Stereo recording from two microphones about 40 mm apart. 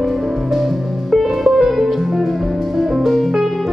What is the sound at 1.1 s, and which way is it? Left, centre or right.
Music, centre.